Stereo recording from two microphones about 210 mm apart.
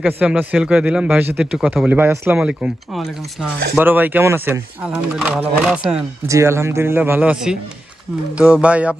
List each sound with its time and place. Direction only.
0.2 s speech: 5° right (ahead or behind)